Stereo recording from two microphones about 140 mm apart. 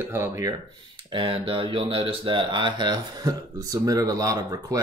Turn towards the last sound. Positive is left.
turn(degrees=-25)  # may be behind; listen again after turning